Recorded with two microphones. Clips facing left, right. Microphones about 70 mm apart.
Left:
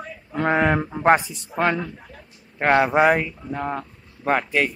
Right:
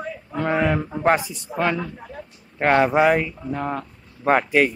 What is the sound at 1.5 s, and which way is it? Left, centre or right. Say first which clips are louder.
Speech: left 1 dB; right.